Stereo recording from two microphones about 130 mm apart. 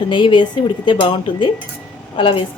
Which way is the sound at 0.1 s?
40° left (ahead or behind).